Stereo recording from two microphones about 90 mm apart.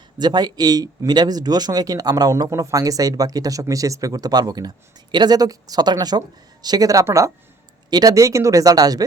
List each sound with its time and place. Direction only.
0.2 s speech: 50° right (ahead or behind)
2.5 s speech: 35° right (ahead or behind)
7.9 s speech: 45° right (ahead or behind)